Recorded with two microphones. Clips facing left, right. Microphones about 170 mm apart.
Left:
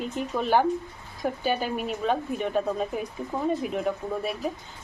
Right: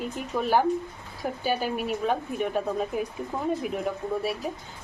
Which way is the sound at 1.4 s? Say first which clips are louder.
Right 1 dB; 5° right (ahead or behind).